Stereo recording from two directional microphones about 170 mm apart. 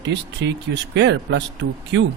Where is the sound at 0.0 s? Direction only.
90° right.